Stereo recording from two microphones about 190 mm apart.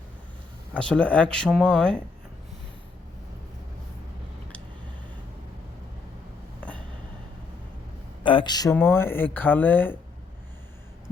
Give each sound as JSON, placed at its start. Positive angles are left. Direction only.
{"t": 0.8, "sound": "speech", "side_deg": 5}
{"t": 6.6, "sound": "train", "side_deg": 5}
{"t": 8.2, "sound": "speech", "side_deg": 25}